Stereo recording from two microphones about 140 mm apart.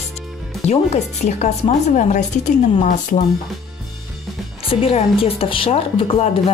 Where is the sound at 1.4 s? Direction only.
55° left (ahead or behind).